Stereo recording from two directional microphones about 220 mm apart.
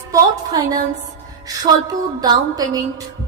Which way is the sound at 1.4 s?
15° right (ahead or behind).